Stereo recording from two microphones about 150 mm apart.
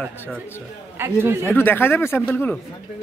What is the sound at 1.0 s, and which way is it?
Speech, 15° right (ahead or behind).